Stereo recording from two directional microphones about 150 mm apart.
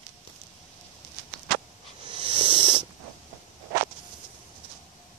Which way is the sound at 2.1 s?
35° right (ahead or behind).